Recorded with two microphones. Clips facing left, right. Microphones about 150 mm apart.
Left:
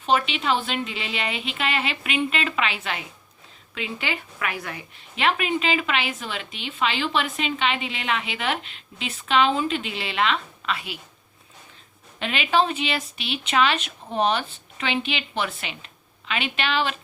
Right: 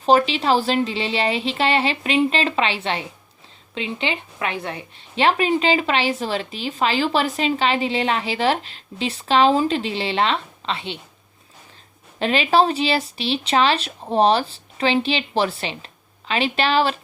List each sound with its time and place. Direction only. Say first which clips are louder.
0.0 s a woman's voice: right 6 dB; 35° right (ahead or behind)
12.2 s a woman's voice: right 5 dB; 35° right (ahead or behind)